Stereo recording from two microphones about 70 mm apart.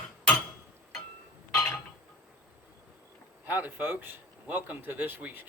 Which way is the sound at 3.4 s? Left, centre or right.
Right.